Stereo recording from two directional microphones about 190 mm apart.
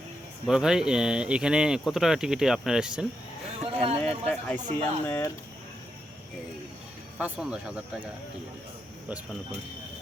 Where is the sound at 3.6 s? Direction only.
35° right (ahead or behind).